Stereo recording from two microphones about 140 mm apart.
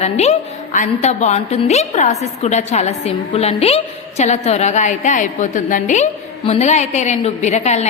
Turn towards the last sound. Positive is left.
turn(degrees=55)  # may be behind; listen again after turning